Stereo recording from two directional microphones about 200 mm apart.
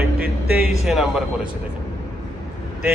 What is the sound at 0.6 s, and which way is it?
Speech, centre (ahead or behind).